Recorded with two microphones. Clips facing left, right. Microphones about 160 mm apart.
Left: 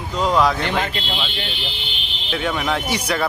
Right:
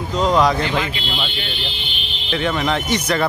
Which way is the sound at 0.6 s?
55° left (ahead or behind).